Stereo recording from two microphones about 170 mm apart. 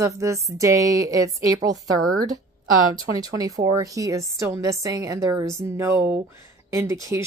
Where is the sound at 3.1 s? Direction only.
20° right (ahead or behind).